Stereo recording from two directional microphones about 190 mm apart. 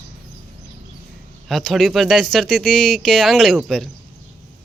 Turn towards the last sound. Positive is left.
turn(degrees=0)  # may be behind; listen again after turning